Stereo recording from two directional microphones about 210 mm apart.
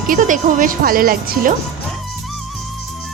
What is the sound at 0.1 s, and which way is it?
Speech, 40° right (ahead or behind).